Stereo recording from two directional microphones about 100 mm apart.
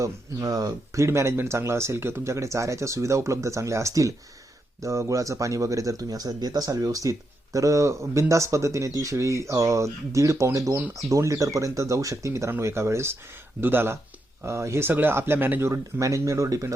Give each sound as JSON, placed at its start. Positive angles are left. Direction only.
{"t": 0.0, "sound": "speech", "side_deg": -35}